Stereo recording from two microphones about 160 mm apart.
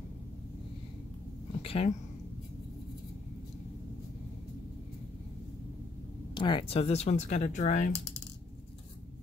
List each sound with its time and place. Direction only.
1.6 s speech: 35° left (ahead or behind)
6.3 s speech: 30° left (ahead or behind); by 7.9 s 50° left (ahead or behind)